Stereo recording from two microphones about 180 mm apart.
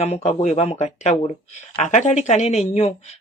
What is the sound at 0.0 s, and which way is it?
Speech, 35° left (ahead or behind).